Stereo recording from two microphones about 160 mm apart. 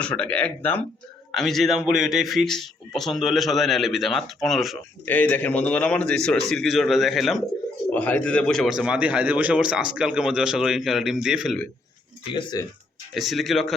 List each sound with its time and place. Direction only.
0.0 s a man's voice: 5° left (ahead or behind)
12.3 s speech: 30° left (ahead or behind)
13.1 s a man's voice: centre (ahead or behind)